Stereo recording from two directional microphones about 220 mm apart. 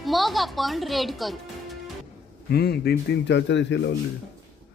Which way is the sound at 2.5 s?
45° left (ahead or behind).